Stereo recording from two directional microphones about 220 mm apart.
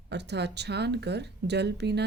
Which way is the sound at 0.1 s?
50° right (ahead or behind).